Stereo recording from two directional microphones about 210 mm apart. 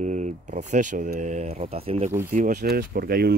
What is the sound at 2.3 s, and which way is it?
Speech, 40° right (ahead or behind).